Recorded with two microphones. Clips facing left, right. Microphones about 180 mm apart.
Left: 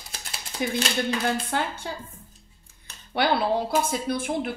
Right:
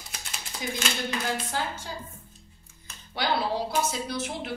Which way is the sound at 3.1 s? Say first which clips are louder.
Left 5 dB; 55° left (ahead or behind).